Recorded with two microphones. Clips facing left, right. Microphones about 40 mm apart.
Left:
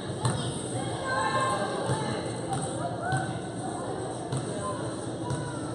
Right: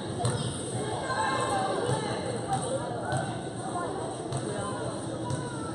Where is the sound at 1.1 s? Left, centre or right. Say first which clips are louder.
Left 2 dB; centre.